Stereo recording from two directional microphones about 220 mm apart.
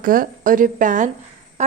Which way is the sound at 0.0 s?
40° right (ahead or behind).